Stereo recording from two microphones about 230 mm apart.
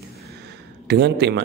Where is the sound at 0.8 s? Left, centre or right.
Right.